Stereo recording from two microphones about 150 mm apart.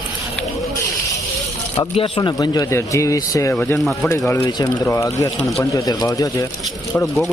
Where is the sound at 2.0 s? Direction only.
35° left (ahead or behind).